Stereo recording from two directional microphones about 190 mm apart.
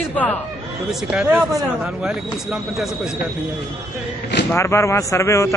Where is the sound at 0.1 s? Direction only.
10° left (ahead or behind).